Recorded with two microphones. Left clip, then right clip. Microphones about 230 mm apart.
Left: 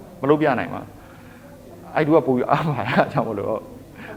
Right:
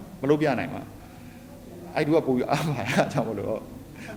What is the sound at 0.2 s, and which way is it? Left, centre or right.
Speech, centre.